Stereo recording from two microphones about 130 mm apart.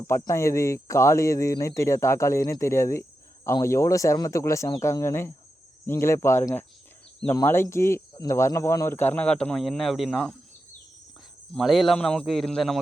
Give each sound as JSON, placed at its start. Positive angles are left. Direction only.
{"t": 0.1, "sound": "speech", "side_deg": 25}
{"t": 11.5, "sound": "a man's voice", "side_deg": 0}